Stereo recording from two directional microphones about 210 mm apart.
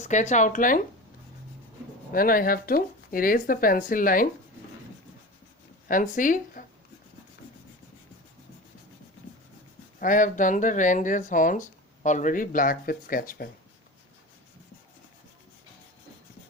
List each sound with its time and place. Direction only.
0.0 s speech: 35° left (ahead or behind)
2.1 s speech: 45° left (ahead or behind)
5.9 s speech: 40° left (ahead or behind)
10.0 s speech: 40° left (ahead or behind)